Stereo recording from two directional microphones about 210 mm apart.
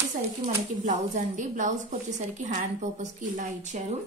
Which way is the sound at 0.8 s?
35° right (ahead or behind).